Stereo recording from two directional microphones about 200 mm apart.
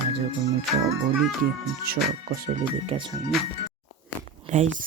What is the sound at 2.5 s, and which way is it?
Speech, 30° right (ahead or behind).